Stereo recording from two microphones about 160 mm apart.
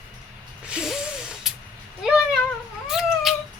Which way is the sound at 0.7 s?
5° right (ahead or behind).